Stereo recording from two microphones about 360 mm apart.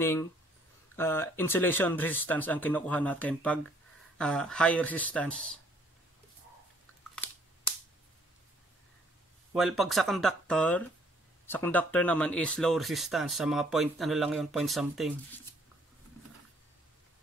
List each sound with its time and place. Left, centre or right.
0.0 s speech: centre
7.2 s camera: centre
9.5 s speech: centre